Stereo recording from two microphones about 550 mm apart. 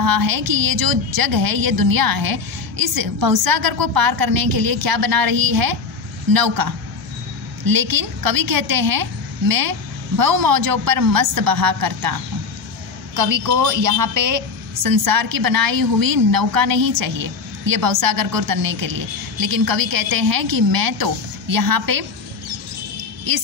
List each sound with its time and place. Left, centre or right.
0.0 s a woman's voice: right
23.3 s a woman's voice: right